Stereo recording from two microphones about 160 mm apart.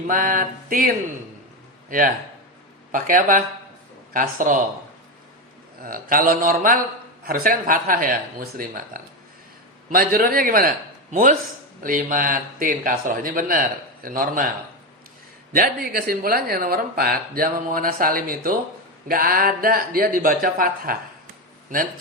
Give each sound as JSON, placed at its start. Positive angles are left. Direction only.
{"t": 0.1, "sound": "speech", "side_deg": -55}
{"t": 1.9, "sound": "speech", "side_deg": -60}
{"t": 5.8, "sound": "speech", "side_deg": -65}
{"t": 11.1, "sound": "speech", "side_deg": -55}
{"t": 15.5, "sound": "speech", "side_deg": -65}